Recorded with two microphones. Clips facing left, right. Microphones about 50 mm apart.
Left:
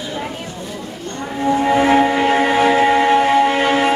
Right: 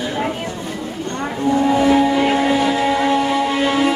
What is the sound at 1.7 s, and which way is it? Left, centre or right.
Music, left.